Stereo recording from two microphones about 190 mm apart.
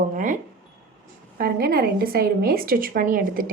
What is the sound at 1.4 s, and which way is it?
A woman's voice, 55° right (ahead or behind).